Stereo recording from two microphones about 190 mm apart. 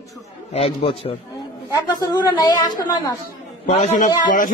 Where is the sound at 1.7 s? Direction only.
20° left (ahead or behind).